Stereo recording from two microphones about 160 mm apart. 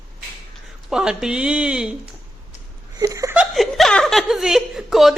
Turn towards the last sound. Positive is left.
turn(degrees=0)  # may be behind; listen again after turning